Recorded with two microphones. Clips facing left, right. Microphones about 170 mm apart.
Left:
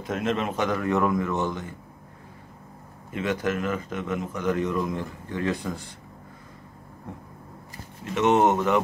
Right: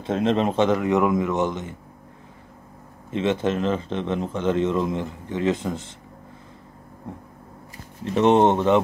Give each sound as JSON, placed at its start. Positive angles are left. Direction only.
{"t": 0.0, "sound": "speech", "side_deg": -30}
{"t": 3.1, "sound": "speech", "side_deg": -25}
{"t": 8.0, "sound": "speech", "side_deg": -30}